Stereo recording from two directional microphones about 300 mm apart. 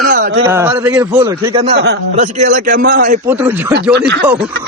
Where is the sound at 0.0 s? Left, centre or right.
Right.